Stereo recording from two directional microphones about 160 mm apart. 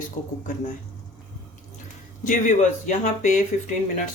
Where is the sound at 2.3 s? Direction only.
55° left (ahead or behind).